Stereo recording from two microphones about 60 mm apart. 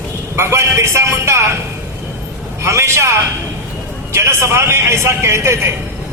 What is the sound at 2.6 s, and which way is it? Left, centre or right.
A man's voice, right.